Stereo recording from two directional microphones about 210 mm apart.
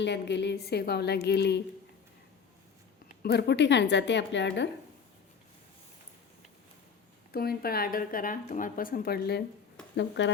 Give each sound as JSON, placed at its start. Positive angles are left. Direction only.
{"t": 0.0, "sound": "speech", "side_deg": 55}
{"t": 3.2, "sound": "a woman's voice", "side_deg": 50}
{"t": 7.3, "sound": "a woman's voice", "side_deg": 45}